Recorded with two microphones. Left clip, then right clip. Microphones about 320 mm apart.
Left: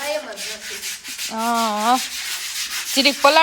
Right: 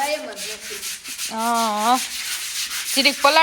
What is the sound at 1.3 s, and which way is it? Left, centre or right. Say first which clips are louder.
Speech: even; centre.